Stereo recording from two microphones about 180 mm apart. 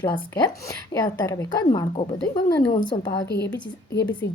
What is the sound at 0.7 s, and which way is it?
A woman's voice, 20° left (ahead or behind).